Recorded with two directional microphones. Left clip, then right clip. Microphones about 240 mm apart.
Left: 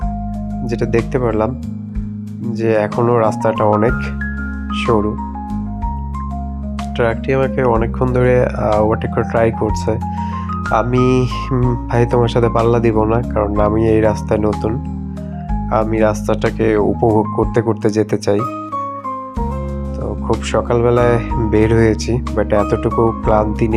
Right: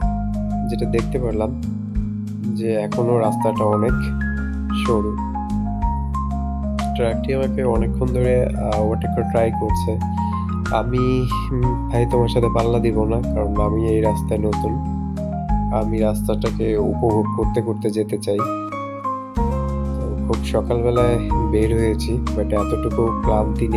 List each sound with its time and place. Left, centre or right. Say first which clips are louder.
1.1 s speech: left 6 dB; centre
2.6 s speech: left 6 dB; centre
7.0 s speech: left 7 dB; centre
10.8 s speech: left 6 dB; centre
15.7 s speech: left 8 dB; centre
17.5 s speech: left 6 dB; centre
20.5 s speech: left 5 dB; centre
22.9 s speech: left 5 dB; centre
23.2 s speech: left 5 dB; centre